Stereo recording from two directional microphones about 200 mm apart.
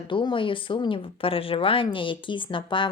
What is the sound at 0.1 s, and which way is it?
Speech, 25° left (ahead or behind).